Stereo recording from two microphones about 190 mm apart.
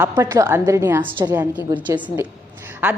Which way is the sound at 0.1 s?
15° right (ahead or behind).